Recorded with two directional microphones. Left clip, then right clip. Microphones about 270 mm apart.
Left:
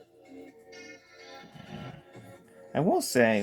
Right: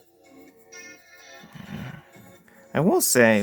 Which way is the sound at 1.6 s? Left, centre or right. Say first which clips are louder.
Right 8 dB; right.